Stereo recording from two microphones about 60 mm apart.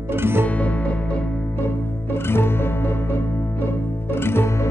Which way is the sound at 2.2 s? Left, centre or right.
Left.